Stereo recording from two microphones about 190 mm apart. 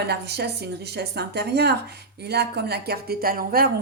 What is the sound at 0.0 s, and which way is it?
Speech, 60° right (ahead or behind).